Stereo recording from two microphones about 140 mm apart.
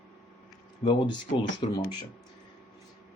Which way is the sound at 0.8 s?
35° left (ahead or behind).